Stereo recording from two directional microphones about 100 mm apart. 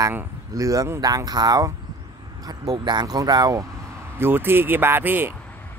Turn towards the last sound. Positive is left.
turn(degrees=-20)  # may be behind; listen again after turning